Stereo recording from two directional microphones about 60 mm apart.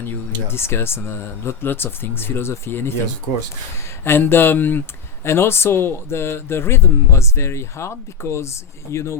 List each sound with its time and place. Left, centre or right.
0.0 s a man's voice: left
4.0 s speech: left
5.2 s a man's voice: left